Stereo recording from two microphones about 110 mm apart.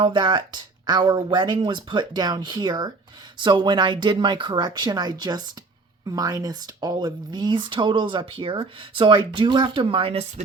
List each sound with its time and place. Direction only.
0.0 s speech: 45° right (ahead or behind); by 10.4 s 65° right (ahead or behind)